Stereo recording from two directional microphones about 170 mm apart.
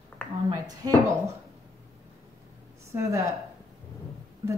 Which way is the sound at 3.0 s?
20° right (ahead or behind).